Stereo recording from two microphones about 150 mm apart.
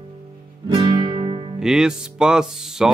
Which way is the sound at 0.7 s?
35° right (ahead or behind).